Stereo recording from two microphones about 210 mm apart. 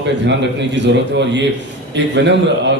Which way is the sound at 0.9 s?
55° right (ahead or behind).